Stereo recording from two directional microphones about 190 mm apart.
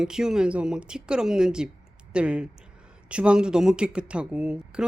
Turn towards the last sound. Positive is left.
turn(degrees=-5)  # may be behind; listen again after turning